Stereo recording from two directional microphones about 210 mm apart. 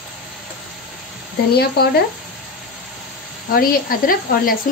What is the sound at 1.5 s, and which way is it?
Speech, 50° left (ahead or behind).